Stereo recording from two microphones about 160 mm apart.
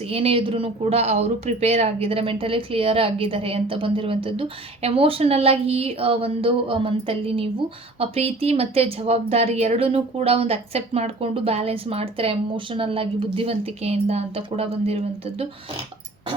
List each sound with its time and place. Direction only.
0.1 s speech: 35° right (ahead or behind)